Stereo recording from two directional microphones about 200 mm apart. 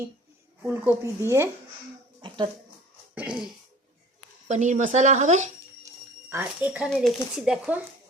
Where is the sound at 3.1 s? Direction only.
5° right (ahead or behind).